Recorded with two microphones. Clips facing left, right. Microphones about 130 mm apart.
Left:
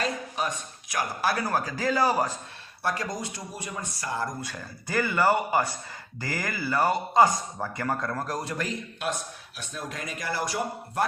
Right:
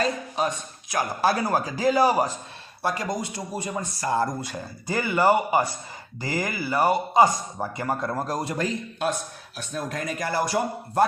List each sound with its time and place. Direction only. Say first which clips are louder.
0.0 s speech: right 4 dB; 30° right (ahead or behind)
4.0 s speech: right 7 dB; 35° right (ahead or behind)
4.4 s a man's voice: right 4 dB; 20° right (ahead or behind)
9.6 s speech: right 6 dB; 45° right (ahead or behind)